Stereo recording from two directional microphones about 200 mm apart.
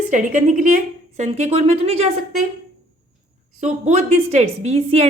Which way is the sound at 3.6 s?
35° right (ahead or behind).